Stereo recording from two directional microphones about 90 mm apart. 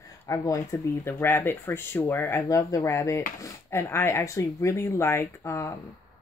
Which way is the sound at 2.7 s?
35° left (ahead or behind).